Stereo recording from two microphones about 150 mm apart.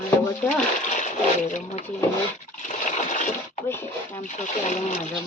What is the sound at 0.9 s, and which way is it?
Speech, 55° left (ahead or behind).